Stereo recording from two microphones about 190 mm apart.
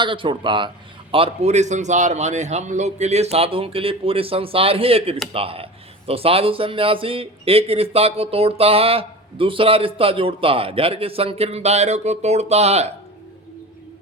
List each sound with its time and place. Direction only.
0.0 s a man's voice: 25° right (ahead or behind)